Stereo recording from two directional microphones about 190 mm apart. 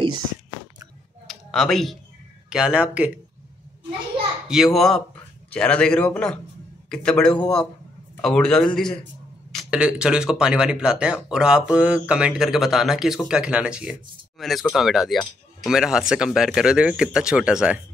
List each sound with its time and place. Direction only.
1.2 s a sound: centre (ahead or behind)
2.5 s a man's voice: 5° right (ahead or behind)
4.5 s a man's voice: centre (ahead or behind)